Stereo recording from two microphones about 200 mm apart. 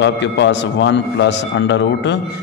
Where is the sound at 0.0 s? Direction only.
60° left (ahead or behind).